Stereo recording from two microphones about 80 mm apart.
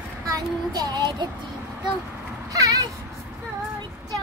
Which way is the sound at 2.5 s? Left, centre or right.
Right.